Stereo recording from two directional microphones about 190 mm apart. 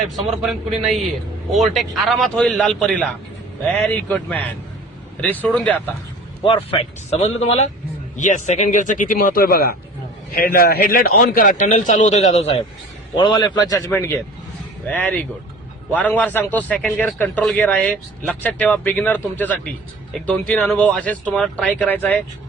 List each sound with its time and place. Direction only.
0.2 s a man's voice: centre (ahead or behind)
6.7 s a man's voice: 30° left (ahead or behind)
13.1 s a man's voice: 25° left (ahead or behind)